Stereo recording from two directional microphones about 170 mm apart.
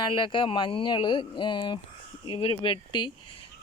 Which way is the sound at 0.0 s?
30° left (ahead or behind).